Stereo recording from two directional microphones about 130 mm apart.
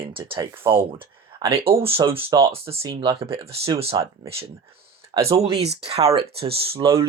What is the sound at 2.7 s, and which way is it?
Speech, 45° right (ahead or behind).